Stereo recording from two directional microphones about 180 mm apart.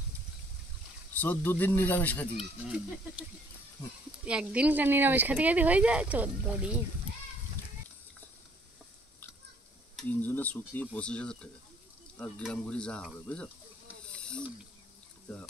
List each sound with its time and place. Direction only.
1.1 s speech: 10° left (ahead or behind)
2.3 s speech: 5° right (ahead or behind)
4.3 s speech: 5° right (ahead or behind)
9.9 s speech: 10° left (ahead or behind)
14.0 s hiss: 5° left (ahead or behind)